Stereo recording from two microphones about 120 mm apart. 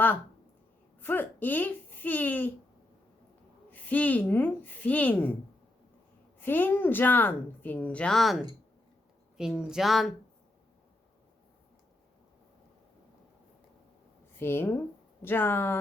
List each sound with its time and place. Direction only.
0.9 s speech: 15° left (ahead or behind)
3.7 s a woman's voice: 15° left (ahead or behind)
6.4 s a woman's voice: 15° left (ahead or behind); by 10.2 s centre (ahead or behind)
14.3 s speech: 20° left (ahead or behind)